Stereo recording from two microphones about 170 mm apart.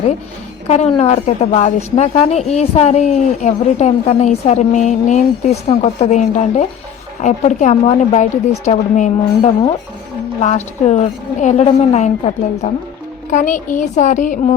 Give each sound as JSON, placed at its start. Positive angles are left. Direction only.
{"t": 0.7, "sound": "a woman's voice", "side_deg": 40}
{"t": 10.4, "sound": "a woman's voice", "side_deg": 40}